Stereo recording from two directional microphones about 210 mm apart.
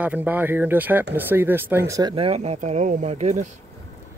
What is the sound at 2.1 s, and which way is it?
Speech, 30° right (ahead or behind).